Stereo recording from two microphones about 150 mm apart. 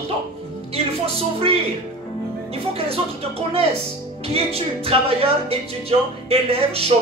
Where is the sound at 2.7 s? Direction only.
40° right (ahead or behind).